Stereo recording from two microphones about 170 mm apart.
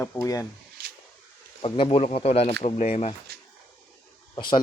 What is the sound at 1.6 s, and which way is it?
Speech, 30° left (ahead or behind).